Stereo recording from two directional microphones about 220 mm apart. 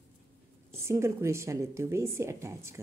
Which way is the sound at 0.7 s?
10° right (ahead or behind).